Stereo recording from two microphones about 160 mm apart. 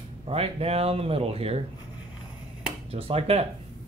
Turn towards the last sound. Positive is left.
turn(degrees=-40)  # may be behind; listen again after turning